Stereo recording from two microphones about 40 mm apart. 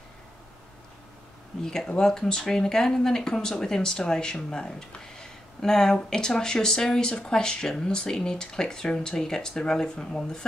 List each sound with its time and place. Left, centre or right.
1.6 s speech: centre